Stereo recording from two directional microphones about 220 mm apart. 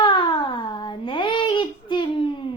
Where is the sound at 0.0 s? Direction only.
20° left (ahead or behind).